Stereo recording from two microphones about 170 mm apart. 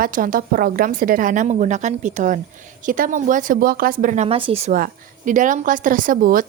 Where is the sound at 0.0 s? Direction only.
55° right (ahead or behind).